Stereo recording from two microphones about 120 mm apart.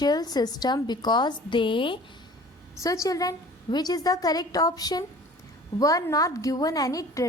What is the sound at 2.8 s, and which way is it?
A woman's voice, 25° left (ahead or behind).